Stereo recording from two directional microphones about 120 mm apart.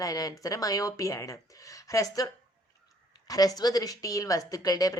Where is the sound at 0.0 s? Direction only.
30° left (ahead or behind).